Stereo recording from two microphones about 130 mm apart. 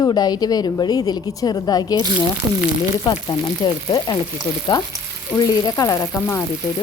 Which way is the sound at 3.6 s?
30° left (ahead or behind).